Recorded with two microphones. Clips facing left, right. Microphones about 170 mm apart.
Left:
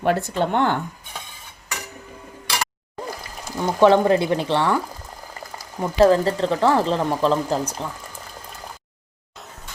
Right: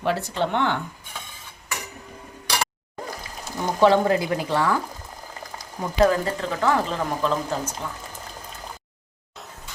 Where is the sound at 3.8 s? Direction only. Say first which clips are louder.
Left 3 dB; 20° left (ahead or behind).